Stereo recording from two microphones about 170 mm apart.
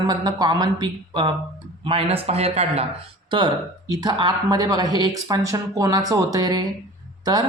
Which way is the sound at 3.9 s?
25° right (ahead or behind).